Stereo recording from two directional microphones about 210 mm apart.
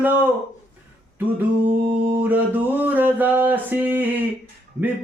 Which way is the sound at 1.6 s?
10° right (ahead or behind).